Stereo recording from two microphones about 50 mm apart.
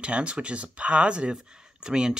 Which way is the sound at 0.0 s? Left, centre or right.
Right.